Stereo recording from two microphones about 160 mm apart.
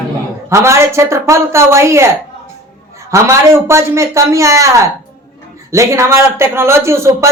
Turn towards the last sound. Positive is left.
turn(degrees=-15)  # may be behind; listen again after turning